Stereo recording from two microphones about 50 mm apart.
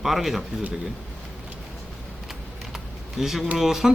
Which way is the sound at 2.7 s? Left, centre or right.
Centre.